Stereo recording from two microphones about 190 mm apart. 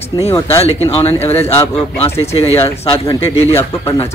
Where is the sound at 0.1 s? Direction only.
20° left (ahead or behind).